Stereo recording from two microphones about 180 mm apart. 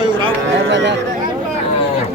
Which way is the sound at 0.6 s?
80° right.